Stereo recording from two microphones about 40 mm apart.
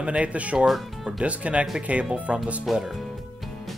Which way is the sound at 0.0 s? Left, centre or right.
Right.